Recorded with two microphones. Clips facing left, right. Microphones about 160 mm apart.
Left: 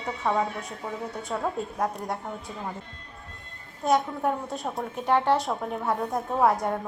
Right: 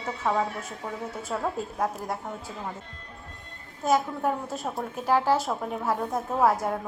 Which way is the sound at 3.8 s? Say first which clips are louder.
Even; centre (ahead or behind).